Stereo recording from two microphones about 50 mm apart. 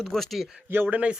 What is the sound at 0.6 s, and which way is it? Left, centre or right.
Speech, right.